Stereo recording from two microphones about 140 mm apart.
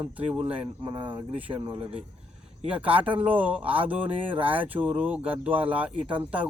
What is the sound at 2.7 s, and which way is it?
Speech, 10° right (ahead or behind).